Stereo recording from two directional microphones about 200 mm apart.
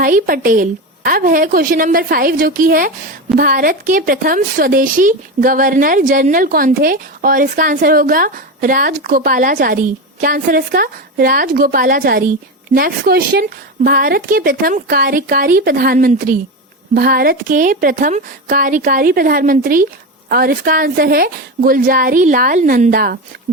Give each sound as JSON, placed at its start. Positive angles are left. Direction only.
{"t": 0.0, "sound": "a woman's voice", "side_deg": -45}